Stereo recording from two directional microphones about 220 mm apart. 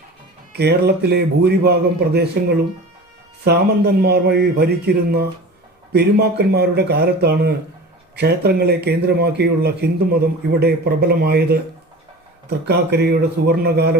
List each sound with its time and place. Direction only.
0.5 s a man's voice: 50° right (ahead or behind)